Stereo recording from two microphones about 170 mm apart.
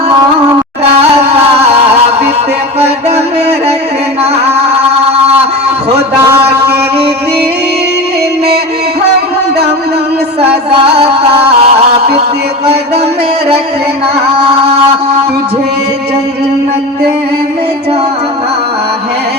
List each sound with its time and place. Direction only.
10.7 s music: 35° right (ahead or behind)